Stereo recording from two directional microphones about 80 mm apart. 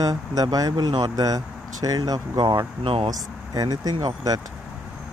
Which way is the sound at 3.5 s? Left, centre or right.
Right.